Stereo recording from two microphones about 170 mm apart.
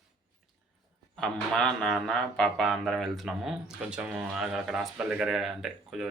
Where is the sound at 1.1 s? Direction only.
Centre (ahead or behind).